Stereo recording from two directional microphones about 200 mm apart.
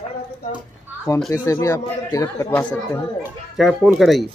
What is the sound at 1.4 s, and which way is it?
Speech, 15° left (ahead or behind).